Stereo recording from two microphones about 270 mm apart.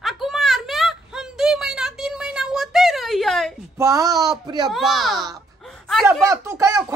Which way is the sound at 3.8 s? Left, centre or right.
Centre.